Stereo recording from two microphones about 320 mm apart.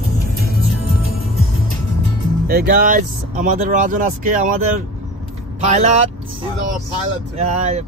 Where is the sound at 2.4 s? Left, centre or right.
Right.